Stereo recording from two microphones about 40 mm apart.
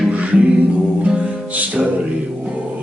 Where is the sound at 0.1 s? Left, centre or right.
Right.